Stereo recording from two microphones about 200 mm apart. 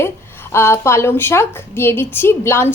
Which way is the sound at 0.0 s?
10° left (ahead or behind).